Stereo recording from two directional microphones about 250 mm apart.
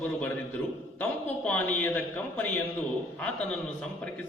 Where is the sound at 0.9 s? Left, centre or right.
Centre.